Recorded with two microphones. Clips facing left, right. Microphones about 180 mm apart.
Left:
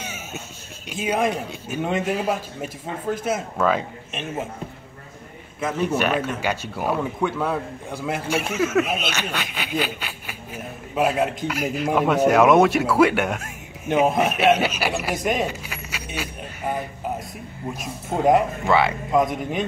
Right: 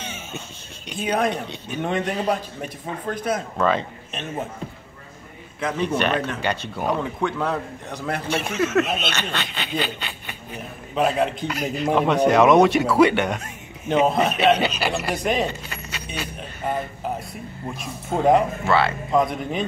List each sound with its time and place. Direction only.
0.0 s a sound: 5° left (ahead or behind)
0.8 s speech: 5° left (ahead or behind)
5.6 s speech: 5° left (ahead or behind)
18.1 s speech: centre (ahead or behind)
18.6 s speech: 15° left (ahead or behind)